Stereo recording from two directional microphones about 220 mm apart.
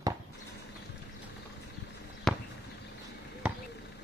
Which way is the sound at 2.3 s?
Centre (ahead or behind).